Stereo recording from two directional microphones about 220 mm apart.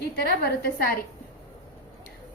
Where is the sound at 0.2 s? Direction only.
45° left (ahead or behind).